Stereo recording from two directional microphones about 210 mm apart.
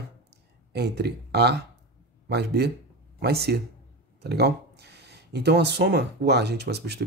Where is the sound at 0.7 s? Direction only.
50° right (ahead or behind).